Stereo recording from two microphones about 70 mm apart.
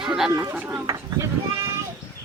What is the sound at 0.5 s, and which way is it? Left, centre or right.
Speech, right.